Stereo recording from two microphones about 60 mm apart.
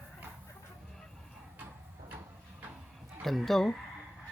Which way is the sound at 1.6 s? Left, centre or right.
Right.